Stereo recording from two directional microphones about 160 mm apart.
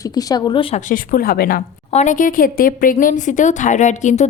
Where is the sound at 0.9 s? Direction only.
60° left (ahead or behind).